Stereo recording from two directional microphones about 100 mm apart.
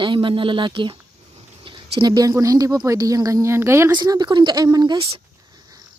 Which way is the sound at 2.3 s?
35° right (ahead or behind).